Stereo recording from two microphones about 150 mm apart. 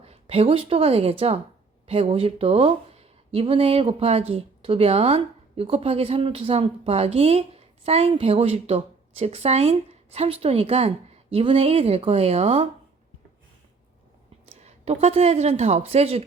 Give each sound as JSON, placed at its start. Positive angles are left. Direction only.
{"t": 0.0, "sound": "a woman's voice", "side_deg": -40}
{"t": 14.4, "sound": "a woman's voice", "side_deg": -45}